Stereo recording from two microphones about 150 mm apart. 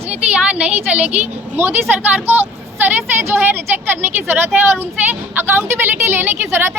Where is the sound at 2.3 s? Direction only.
15° right (ahead or behind).